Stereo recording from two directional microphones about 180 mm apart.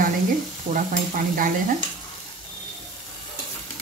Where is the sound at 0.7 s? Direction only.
50° right (ahead or behind).